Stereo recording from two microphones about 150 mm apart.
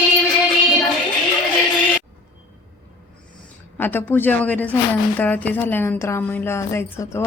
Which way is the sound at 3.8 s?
15° left (ahead or behind).